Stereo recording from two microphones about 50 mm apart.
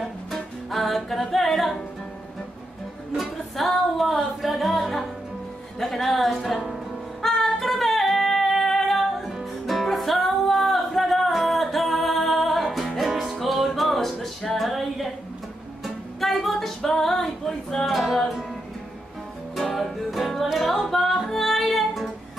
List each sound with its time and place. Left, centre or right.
0.0 s music: centre
3.2 s music: centre
19.5 s music: centre